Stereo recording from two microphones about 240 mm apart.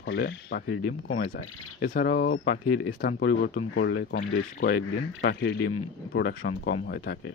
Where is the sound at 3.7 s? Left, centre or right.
Left.